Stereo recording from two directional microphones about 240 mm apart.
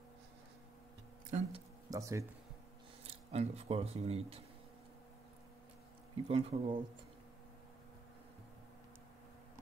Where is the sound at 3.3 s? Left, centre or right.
Right.